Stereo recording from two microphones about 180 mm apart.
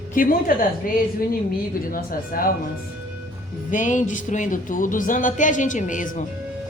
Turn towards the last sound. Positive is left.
turn(degrees=45)  # may be behind; listen again after turning